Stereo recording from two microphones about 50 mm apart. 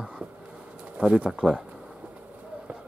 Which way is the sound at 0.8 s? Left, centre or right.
Right.